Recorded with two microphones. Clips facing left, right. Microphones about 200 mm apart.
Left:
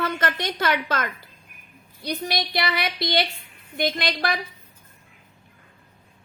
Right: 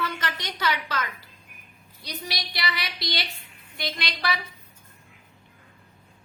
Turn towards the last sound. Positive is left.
turn(degrees=50)  # may be behind; listen again after turning